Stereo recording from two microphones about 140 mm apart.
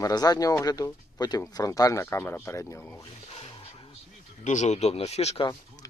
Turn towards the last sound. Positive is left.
turn(degrees=25)  # may be behind; listen again after turning